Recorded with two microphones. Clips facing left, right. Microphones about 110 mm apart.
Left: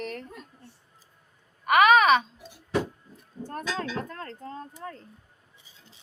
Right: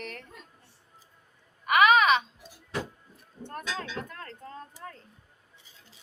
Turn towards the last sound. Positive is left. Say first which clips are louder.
# left 4 dB
turn(degrees=30)  # may be behind; listen again after turning